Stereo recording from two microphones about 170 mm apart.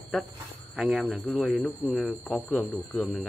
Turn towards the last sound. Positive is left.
turn(degrees=5)  # may be behind; listen again after turning